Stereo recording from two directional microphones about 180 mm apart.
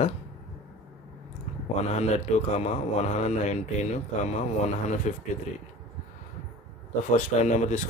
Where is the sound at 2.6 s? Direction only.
35° left (ahead or behind).